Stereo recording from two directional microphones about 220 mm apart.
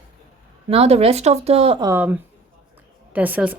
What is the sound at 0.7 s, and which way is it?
Speech, 25° right (ahead or behind).